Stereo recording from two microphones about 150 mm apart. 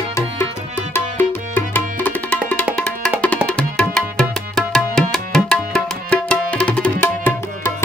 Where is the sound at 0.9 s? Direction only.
15° left (ahead or behind).